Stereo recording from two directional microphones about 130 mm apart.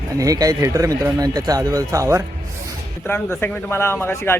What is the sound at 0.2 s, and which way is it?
Speech, 25° right (ahead or behind).